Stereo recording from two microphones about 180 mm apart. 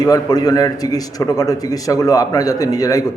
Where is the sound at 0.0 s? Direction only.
20° left (ahead or behind).